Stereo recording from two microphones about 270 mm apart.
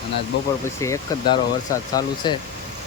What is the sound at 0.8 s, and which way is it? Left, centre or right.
Speech, centre.